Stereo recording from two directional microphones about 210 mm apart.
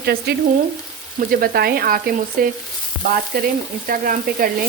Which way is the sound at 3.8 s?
40° right (ahead or behind).